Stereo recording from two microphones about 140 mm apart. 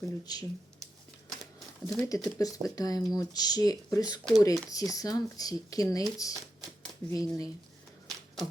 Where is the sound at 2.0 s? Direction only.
25° left (ahead or behind).